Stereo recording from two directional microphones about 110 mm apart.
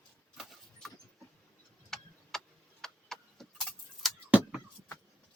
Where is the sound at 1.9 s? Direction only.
5° left (ahead or behind).